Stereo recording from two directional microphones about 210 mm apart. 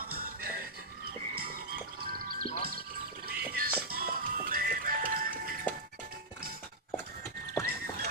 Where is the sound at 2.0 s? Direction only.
40° right (ahead or behind).